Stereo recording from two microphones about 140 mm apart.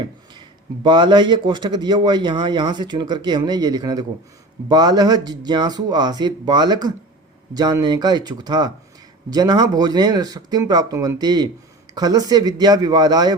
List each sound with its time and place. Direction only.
0.9 s speech: 35° right (ahead or behind)